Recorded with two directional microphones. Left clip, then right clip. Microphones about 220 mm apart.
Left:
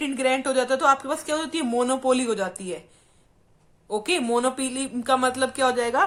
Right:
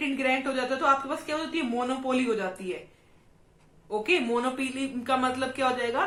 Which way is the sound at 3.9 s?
45° left (ahead or behind).